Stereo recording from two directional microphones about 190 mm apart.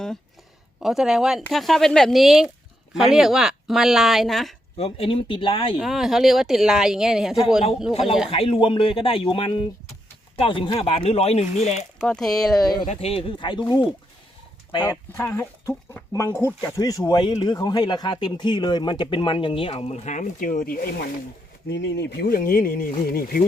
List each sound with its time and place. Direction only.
0.8 s speech: centre (ahead or behind)
4.8 s speech: 30° left (ahead or behind)
5.8 s speech: centre (ahead or behind)
8.3 s speech: 30° left (ahead or behind)
11.9 s speech: 5° left (ahead or behind)
12.9 s speech: 30° left (ahead or behind)
15.1 s speech: 15° left (ahead or behind); by 21.1 s 55° left (ahead or behind)
21.7 s speech: 65° left (ahead or behind); by 23.5 s 50° left (ahead or behind)